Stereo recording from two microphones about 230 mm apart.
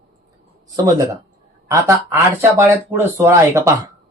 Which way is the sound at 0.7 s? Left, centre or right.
Centre.